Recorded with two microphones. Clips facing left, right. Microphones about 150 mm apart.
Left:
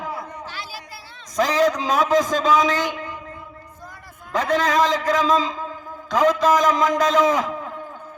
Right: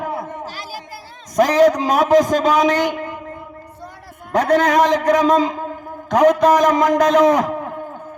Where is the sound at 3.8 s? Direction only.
70° right (ahead or behind).